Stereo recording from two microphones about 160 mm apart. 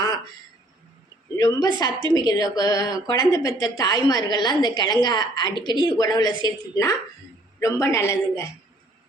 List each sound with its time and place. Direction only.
1.4 s a woman's voice: 25° left (ahead or behind)